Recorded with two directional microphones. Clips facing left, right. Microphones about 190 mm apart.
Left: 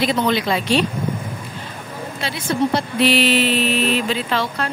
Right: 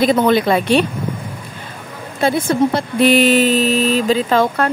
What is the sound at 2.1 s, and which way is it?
Speech, 50° right (ahead or behind).